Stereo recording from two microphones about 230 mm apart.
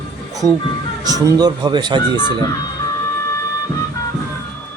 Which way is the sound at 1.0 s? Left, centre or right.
Centre.